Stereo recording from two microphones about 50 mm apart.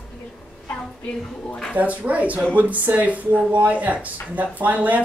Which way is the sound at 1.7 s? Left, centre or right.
Right.